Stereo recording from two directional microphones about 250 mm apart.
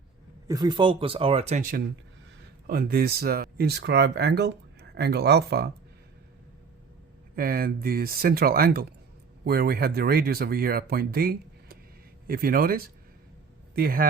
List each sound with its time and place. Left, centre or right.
0.4 s speech: centre; by 5.7 s right
7.3 s speech: right